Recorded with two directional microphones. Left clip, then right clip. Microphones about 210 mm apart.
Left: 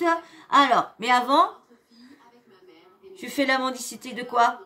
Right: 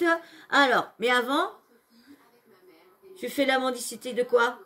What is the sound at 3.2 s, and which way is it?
Speech, 70° left (ahead or behind).